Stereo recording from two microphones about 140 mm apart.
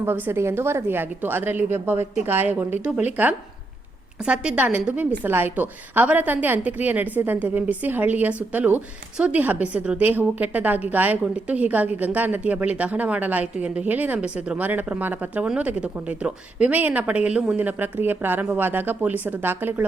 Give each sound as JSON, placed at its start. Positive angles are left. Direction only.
{"t": 0.0, "sound": "a woman's voice", "side_deg": -15}